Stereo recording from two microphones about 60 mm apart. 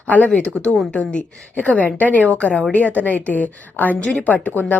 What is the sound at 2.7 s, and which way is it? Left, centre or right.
A woman's voice, left.